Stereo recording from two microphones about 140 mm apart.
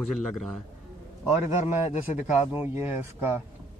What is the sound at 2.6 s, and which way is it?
Speech, 15° right (ahead or behind).